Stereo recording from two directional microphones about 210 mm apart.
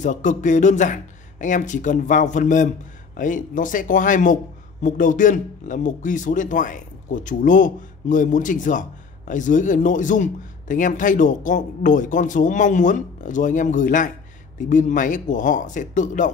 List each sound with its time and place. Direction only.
0.0 s a man's voice: 35° left (ahead or behind)